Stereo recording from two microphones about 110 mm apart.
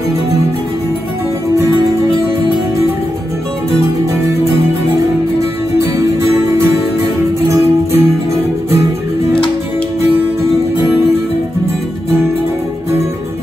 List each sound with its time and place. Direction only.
7.4 s music: 25° right (ahead or behind)